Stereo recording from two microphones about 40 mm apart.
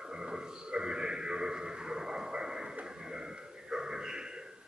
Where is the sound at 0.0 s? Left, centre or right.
Centre.